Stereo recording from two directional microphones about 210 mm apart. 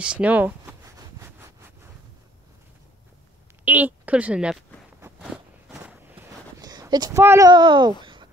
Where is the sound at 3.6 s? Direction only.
10° right (ahead or behind).